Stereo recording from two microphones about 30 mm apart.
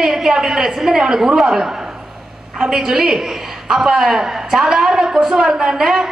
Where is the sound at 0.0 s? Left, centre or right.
Centre.